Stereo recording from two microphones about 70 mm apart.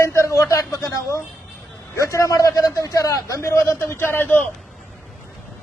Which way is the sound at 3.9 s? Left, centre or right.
Left.